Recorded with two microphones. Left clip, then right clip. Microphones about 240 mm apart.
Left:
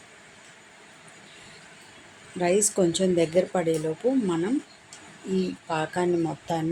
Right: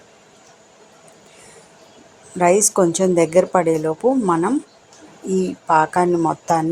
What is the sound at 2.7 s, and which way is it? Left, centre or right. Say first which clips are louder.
A woman's voice: right 7 dB; centre.